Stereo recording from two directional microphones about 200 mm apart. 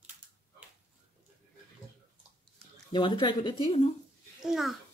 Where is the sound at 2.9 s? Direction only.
20° left (ahead or behind).